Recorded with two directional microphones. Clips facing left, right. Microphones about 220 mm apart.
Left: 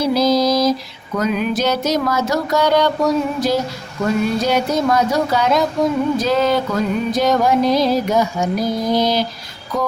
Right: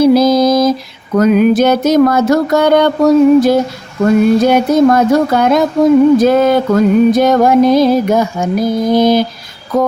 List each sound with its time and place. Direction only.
0.0 s mantra: 50° right (ahead or behind)
1.1 s music: 50° right (ahead or behind)